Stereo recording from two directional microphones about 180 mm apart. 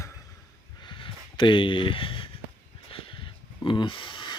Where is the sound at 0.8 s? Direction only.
25° left (ahead or behind).